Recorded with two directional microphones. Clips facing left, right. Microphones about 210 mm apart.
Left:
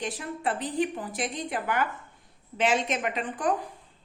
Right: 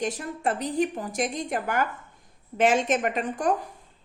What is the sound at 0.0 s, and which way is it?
A woman's voice, 45° right (ahead or behind).